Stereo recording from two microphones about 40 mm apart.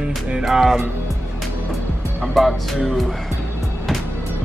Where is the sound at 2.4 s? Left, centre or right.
Centre.